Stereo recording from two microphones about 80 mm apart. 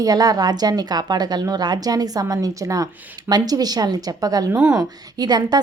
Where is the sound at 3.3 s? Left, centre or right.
Right.